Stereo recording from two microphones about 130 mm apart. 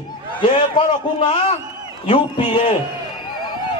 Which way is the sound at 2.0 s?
40° left (ahead or behind).